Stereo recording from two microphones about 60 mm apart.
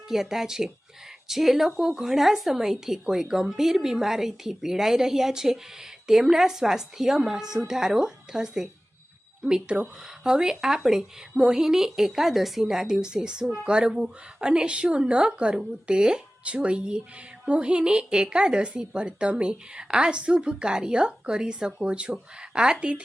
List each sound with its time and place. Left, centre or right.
0.1 s a woman's voice: centre